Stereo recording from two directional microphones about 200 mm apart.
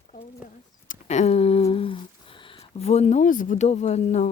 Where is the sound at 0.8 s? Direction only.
35° left (ahead or behind).